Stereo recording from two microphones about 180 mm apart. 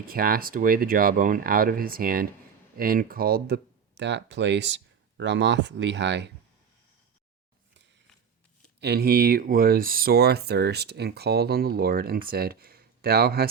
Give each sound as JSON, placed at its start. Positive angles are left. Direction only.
{"t": 0.0, "sound": "speech", "side_deg": -55}
{"t": 8.8, "sound": "speech", "side_deg": -60}